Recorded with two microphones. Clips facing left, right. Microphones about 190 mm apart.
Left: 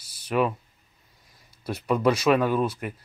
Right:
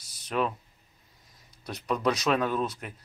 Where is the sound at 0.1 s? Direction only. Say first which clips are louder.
Left 5 dB; 5° left (ahead or behind).